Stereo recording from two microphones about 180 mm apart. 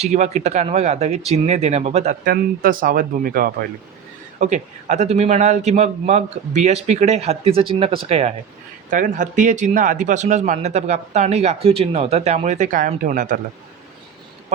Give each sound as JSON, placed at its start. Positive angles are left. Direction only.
{"t": 0.0, "sound": "speech", "side_deg": -40}
{"t": 2.2, "sound": "speech", "side_deg": -50}
{"t": 4.4, "sound": "speech", "side_deg": -40}
{"t": 8.9, "sound": "speech", "side_deg": -45}